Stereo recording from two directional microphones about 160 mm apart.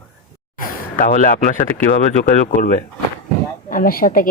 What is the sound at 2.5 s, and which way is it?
Speech, 50° left (ahead or behind).